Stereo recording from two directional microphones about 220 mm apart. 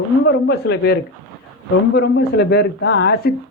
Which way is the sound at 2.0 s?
45° left (ahead or behind).